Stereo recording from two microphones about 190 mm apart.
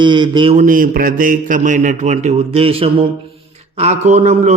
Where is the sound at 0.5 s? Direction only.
45° right (ahead or behind).